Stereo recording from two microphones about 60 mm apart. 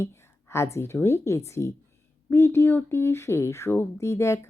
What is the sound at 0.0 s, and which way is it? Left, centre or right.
Speech, left.